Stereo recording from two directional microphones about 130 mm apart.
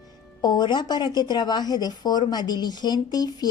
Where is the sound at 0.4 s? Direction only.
35° left (ahead or behind).